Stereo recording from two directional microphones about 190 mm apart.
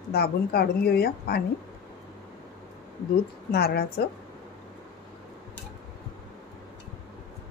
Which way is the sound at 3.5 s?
55° left (ahead or behind).